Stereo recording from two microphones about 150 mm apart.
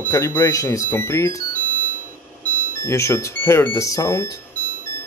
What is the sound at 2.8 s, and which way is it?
Speech, 20° left (ahead or behind).